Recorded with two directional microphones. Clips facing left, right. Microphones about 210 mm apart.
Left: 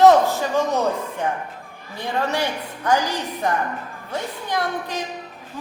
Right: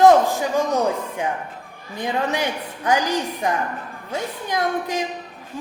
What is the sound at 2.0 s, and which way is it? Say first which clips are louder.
A woman's voice: even; 15° right (ahead or behind).